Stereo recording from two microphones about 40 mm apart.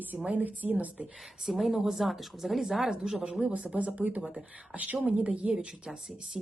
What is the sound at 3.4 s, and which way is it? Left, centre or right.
Speech, right.